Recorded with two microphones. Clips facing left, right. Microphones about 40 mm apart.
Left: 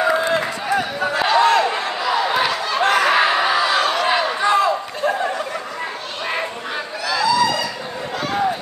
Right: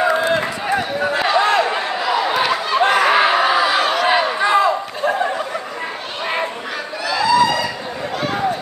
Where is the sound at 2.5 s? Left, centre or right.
Right.